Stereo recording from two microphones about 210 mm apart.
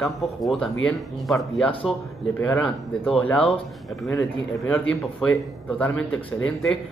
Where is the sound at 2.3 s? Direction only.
10° left (ahead or behind).